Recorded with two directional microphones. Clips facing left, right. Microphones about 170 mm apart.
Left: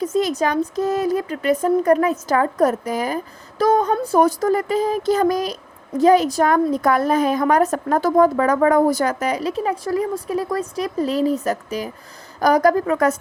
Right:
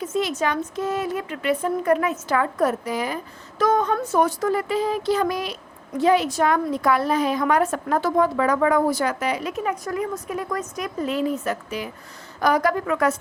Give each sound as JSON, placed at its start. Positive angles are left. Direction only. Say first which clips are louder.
{"t": 0.0, "sound": "a woman's voice", "louder": "left 4 dB", "side_deg": 40}